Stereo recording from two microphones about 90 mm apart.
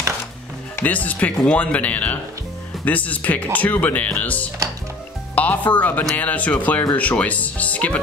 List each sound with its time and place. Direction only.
0.7 s speech: 20° left (ahead or behind)